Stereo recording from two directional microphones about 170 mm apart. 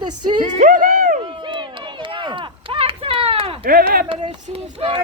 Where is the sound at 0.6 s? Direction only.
50° right (ahead or behind).